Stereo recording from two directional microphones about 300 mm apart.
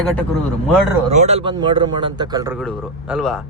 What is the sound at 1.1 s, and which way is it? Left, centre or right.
Speech, right.